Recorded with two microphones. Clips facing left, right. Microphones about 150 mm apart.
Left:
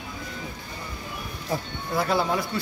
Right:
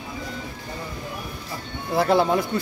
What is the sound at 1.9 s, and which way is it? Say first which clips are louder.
Speech: right 5 dB; 25° right (ahead or behind).